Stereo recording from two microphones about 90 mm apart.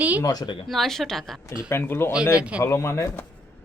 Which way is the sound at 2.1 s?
10° right (ahead or behind).